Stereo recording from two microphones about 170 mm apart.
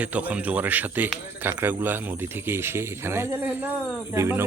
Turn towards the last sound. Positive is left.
turn(degrees=-15)  # may be behind; listen again after turning